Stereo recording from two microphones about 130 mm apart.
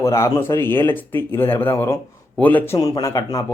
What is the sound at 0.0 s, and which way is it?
Speech, 25° left (ahead or behind).